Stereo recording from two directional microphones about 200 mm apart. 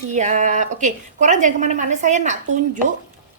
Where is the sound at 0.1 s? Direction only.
35° right (ahead or behind).